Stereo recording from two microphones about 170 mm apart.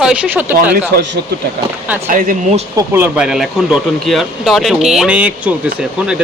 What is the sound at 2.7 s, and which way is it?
Speech, 15° right (ahead or behind).